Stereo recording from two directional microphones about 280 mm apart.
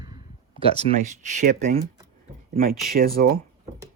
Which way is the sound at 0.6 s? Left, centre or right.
Right.